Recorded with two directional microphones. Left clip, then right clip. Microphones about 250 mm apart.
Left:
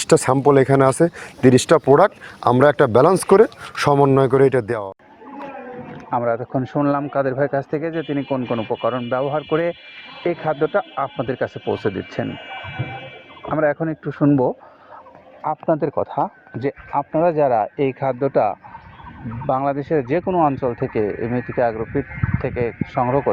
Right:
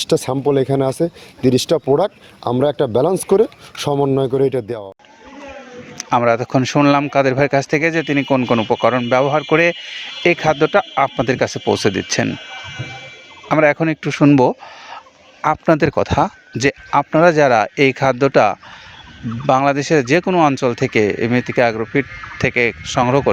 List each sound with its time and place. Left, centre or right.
0.2 s speech: centre
6.1 s speech: right
12.5 s sheep: centre
13.5 s a man's voice: right